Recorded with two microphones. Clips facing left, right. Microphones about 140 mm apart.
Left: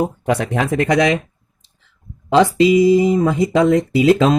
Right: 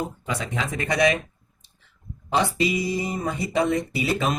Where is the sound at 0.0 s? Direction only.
65° left (ahead or behind); by 1.2 s 90° left.